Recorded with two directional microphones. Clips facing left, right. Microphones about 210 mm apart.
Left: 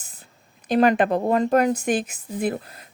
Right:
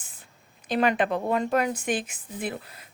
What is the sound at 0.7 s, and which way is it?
A woman's voice, 40° left (ahead or behind).